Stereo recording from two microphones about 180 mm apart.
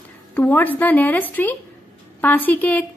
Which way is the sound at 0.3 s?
10° left (ahead or behind).